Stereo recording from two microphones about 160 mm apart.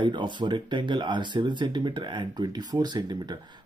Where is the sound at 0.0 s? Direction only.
30° right (ahead or behind).